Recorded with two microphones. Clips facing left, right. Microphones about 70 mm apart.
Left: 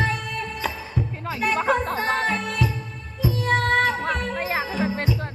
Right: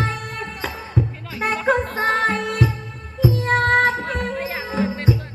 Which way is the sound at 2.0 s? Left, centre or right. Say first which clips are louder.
Right 4 dB; right.